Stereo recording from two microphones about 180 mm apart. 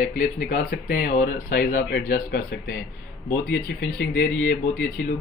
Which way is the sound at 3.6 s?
80° left.